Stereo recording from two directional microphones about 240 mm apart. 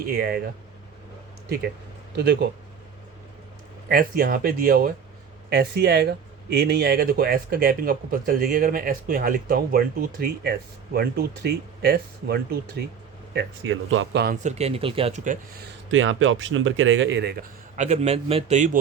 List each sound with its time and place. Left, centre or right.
0.0 s speech: right
2.1 s speech: right
3.8 s speech: right
14.4 s speech: right
15.9 s speech: right
17.7 s speech: right